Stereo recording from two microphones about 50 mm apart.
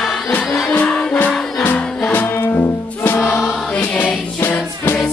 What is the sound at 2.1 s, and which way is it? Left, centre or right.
Music, left.